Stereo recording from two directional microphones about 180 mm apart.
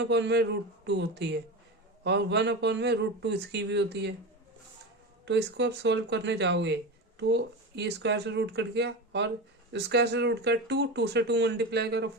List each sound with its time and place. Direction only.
0.0 s speech: 75° right (ahead or behind)
5.2 s speech: 75° right (ahead or behind)